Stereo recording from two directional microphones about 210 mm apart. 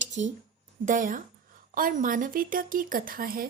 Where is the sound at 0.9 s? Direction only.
40° right (ahead or behind).